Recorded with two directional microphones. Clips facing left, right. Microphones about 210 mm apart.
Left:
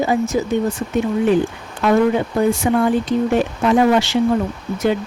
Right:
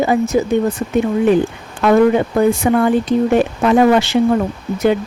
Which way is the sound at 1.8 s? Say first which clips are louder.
Right 4 dB; 60° right (ahead or behind).